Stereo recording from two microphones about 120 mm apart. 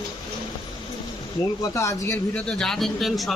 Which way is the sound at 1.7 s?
25° left (ahead or behind).